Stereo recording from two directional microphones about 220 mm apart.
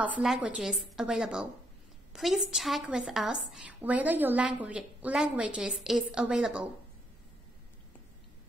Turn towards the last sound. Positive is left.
turn(degrees=-5)  # may be behind; listen again after turning